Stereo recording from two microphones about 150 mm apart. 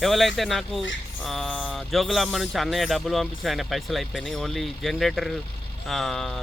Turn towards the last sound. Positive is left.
turn(degrees=0)  # may be behind; listen again after turning